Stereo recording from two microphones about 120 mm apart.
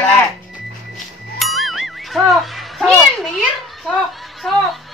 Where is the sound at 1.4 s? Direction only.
Centre (ahead or behind).